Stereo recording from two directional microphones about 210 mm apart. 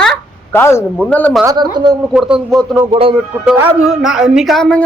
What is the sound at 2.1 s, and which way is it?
Speech, 5° right (ahead or behind).